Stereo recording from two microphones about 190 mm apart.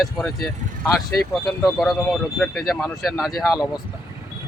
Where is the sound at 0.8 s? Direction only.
15° left (ahead or behind).